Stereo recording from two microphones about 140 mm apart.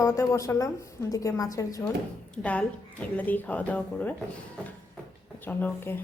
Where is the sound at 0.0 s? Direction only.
20° left (ahead or behind).